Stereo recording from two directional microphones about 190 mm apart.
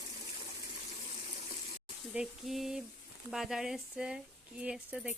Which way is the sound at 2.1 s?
5° right (ahead or behind).